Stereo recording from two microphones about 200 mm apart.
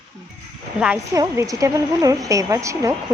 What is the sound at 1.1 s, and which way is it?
A woman's voice, 15° right (ahead or behind).